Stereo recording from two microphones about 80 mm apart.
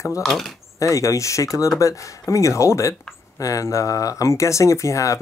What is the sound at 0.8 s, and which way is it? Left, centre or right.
Speech, left.